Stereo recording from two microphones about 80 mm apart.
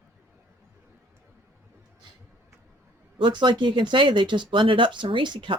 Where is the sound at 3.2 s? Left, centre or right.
Right.